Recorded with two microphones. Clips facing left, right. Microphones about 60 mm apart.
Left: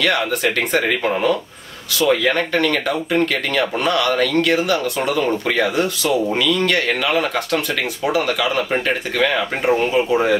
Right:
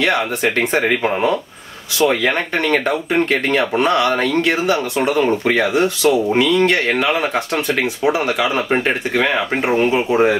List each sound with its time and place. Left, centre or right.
0.0 s speech: right